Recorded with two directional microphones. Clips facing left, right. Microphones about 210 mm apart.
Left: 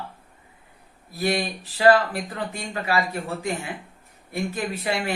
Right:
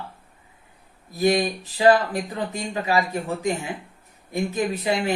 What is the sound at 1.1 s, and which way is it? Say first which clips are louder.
Speech: right 5 dB; 15° right (ahead or behind).